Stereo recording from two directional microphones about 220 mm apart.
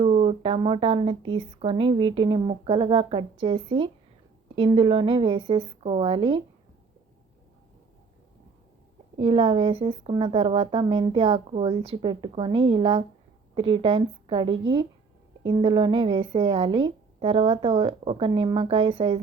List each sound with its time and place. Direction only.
0.0 s speech: 25° right (ahead or behind)
9.1 s speech: 25° right (ahead or behind)